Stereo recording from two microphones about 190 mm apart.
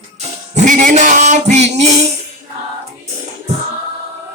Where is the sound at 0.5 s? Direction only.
40° right (ahead or behind).